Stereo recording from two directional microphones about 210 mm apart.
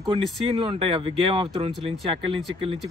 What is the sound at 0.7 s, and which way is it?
Speech, 25° right (ahead or behind).